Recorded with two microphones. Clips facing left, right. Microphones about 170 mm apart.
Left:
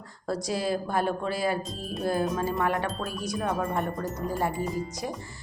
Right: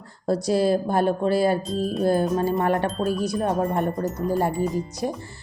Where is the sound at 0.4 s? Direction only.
30° right (ahead or behind).